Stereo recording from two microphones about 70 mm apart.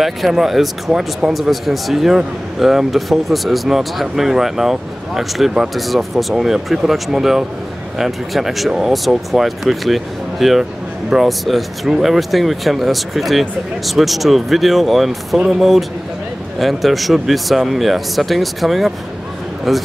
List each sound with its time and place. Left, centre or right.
0.0 s speech: centre